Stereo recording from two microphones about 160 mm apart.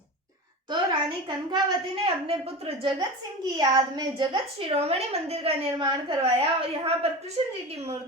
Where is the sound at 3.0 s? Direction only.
25° right (ahead or behind).